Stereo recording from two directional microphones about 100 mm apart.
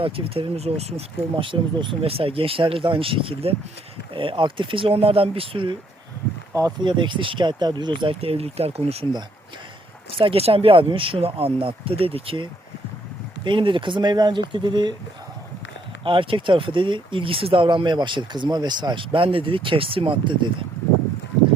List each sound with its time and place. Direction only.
0.0 s speech: 80° right
6.5 s speech: 35° right (ahead or behind)
6.8 s speech: 55° right (ahead or behind)
8.2 s speech: 85° right
10.1 s speech: 65° right (ahead or behind)
13.4 s speech: 55° right (ahead or behind)
16.0 s speech: 60° right (ahead or behind)